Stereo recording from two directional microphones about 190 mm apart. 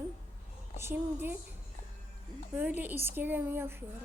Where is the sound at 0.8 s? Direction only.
10° right (ahead or behind).